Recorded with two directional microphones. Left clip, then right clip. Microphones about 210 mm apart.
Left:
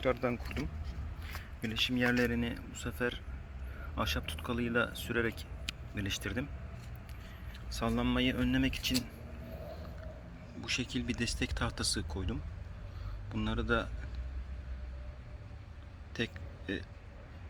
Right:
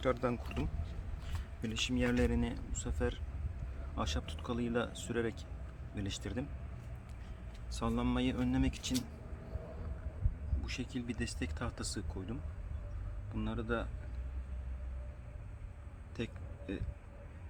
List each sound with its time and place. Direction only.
0.0 s speech: 5° right (ahead or behind)
7.7 s speech: centre (ahead or behind)
10.6 s a man's voice: 15° left (ahead or behind)
16.1 s a sound: 10° left (ahead or behind)